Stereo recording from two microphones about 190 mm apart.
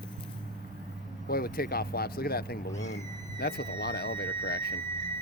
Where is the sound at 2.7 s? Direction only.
35° left (ahead or behind).